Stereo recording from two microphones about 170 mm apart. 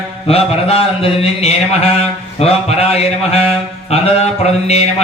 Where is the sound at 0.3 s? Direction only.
35° left (ahead or behind).